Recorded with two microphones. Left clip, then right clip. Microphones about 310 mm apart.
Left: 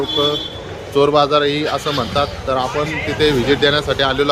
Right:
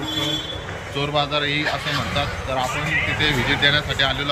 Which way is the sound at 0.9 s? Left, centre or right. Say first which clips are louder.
Left 9 dB; centre.